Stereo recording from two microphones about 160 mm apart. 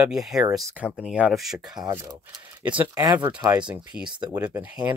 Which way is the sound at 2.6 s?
10° right (ahead or behind).